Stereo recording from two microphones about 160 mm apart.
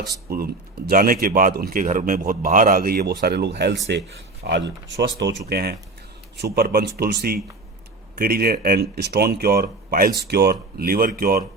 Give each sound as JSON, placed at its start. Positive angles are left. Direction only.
{"t": 0.3, "sound": "speech", "side_deg": -70}
{"t": 10.2, "sound": "speech", "side_deg": -85}